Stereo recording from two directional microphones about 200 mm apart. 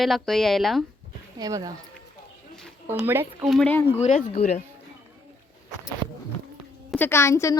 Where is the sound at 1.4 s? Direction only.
20° right (ahead or behind).